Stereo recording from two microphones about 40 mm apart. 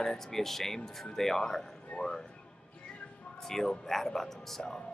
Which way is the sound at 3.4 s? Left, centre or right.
Centre.